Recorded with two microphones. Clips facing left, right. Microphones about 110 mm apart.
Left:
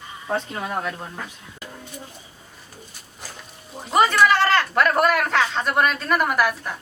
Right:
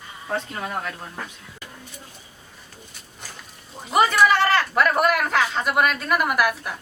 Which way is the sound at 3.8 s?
5° right (ahead or behind).